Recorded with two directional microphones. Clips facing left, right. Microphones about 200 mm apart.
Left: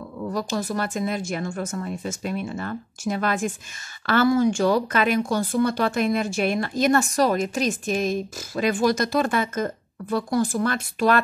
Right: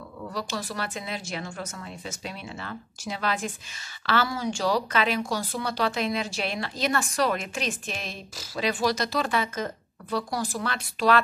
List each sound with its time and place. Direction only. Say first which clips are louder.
0.3 s a woman's voice: left 7 dB; 45° left (ahead or behind)